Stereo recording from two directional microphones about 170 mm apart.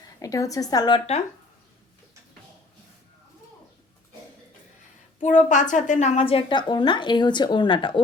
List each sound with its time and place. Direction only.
0.2 s a woman's voice: 20° left (ahead or behind)
5.2 s a woman's voice: 45° left (ahead or behind); by 8.0 s 30° left (ahead or behind)